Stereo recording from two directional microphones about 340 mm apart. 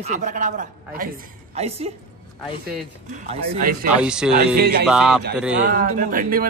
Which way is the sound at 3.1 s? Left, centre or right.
Right.